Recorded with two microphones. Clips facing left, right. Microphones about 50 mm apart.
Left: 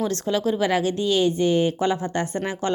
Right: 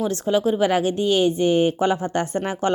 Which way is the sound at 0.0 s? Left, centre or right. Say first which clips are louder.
Right 3 dB; centre.